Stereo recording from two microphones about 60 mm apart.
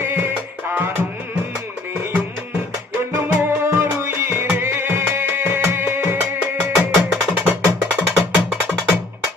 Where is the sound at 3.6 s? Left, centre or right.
Right.